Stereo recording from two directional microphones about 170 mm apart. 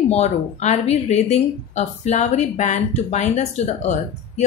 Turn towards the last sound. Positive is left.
turn(degrees=40)  # may be behind; listen again after turning